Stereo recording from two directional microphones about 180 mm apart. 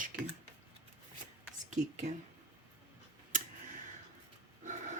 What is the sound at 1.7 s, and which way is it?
Speech, 40° right (ahead or behind).